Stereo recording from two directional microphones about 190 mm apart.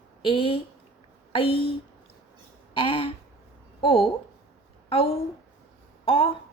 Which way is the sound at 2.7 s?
25° left (ahead or behind).